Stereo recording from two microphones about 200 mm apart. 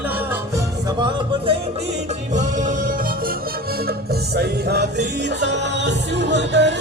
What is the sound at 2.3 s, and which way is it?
Music, 40° right (ahead or behind).